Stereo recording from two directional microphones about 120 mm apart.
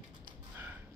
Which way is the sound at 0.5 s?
15° right (ahead or behind).